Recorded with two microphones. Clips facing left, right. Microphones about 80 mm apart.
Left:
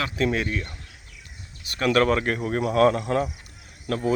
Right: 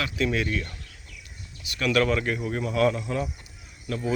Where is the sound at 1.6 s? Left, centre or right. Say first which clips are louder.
Left 3 dB; left.